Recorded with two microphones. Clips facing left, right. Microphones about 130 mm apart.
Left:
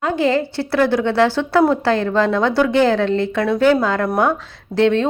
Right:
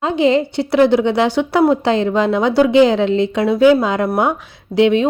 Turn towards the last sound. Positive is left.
turn(degrees=-15)  # may be behind; listen again after turning